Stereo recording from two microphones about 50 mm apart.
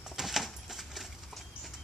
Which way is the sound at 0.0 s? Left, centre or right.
Centre.